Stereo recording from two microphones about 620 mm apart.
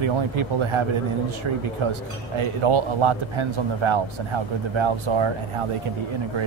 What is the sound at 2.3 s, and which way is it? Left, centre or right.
A man's voice, right.